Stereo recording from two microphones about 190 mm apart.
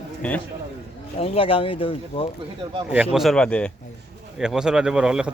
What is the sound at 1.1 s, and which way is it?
Speech, 30° left (ahead or behind).